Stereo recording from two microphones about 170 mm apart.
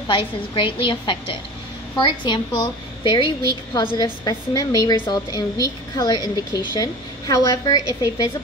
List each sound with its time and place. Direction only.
0.1 s a woman's voice: 30° left (ahead or behind)